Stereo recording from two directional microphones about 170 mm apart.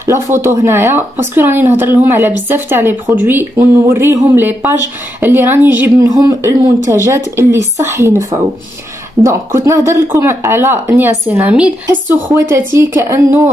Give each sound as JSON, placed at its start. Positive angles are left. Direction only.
{"t": 0.0, "sound": "speech", "side_deg": -15}